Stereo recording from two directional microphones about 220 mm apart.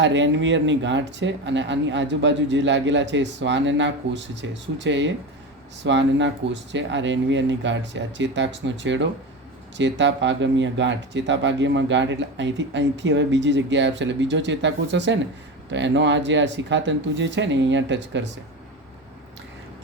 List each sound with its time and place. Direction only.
0.0 s speech: 55° right (ahead or behind)